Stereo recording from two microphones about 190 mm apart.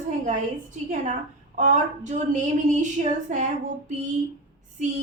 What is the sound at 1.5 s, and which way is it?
A woman's voice, 40° right (ahead or behind).